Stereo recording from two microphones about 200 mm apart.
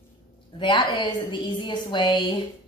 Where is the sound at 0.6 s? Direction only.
25° left (ahead or behind).